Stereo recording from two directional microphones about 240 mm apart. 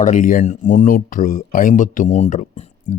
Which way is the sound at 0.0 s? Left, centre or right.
Left.